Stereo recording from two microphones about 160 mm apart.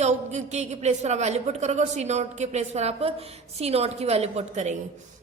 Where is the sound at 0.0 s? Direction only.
45° right (ahead or behind).